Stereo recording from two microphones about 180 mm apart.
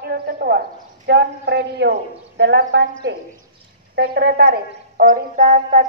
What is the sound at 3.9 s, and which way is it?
A woman's voice, 60° right (ahead or behind).